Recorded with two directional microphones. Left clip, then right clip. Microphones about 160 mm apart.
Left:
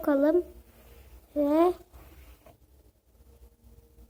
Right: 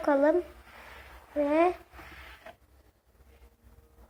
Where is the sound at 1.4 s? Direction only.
30° left (ahead or behind).